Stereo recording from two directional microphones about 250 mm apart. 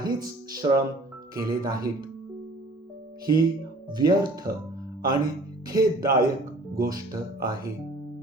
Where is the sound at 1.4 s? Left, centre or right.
Right.